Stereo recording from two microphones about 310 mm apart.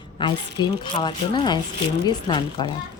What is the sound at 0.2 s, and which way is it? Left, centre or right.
A woman's voice, centre.